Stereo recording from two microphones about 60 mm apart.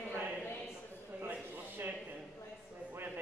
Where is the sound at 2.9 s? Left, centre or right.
Right.